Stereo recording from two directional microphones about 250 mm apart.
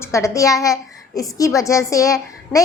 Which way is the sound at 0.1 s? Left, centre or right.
Centre.